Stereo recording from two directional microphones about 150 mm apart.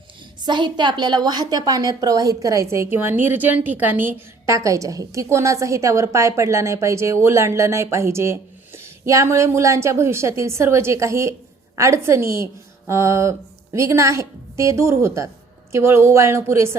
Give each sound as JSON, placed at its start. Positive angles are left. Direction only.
{"t": 0.4, "sound": "a woman's voice", "side_deg": -30}